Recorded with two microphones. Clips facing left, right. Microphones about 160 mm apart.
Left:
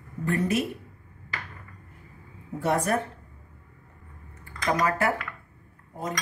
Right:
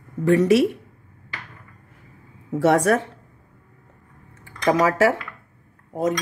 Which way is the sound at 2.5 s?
90° right.